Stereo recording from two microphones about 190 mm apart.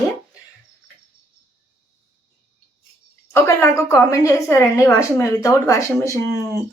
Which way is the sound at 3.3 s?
15° left (ahead or behind).